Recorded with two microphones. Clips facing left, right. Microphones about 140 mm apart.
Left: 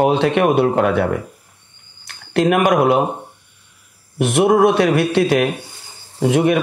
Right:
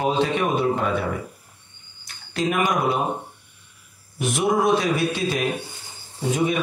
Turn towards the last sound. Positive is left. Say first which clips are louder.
# left 7 dB
turn(degrees=70)  # may be behind; listen again after turning